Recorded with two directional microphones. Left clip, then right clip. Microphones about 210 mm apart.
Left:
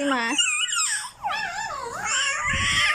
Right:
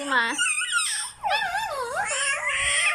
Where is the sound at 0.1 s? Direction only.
5° left (ahead or behind).